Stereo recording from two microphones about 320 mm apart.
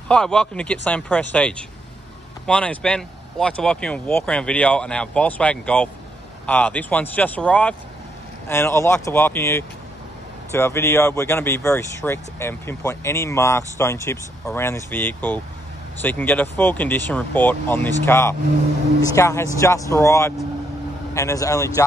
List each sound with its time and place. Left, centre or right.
0.1 s speech: centre